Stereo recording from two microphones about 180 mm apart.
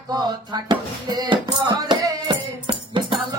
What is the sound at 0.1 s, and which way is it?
Music, 25° right (ahead or behind).